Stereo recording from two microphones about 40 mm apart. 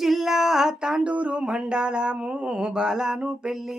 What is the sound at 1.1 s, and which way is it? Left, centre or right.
Speech, right.